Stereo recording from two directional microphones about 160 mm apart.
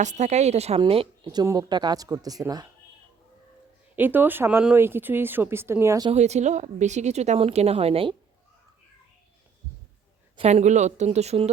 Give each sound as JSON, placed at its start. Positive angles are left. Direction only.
{"t": 0.0, "sound": "a woman's voice", "side_deg": -50}
{"t": 3.9, "sound": "speech", "side_deg": -10}
{"t": 6.1, "sound": "a woman's voice", "side_deg": -45}
{"t": 10.3, "sound": "a woman's voice", "side_deg": -45}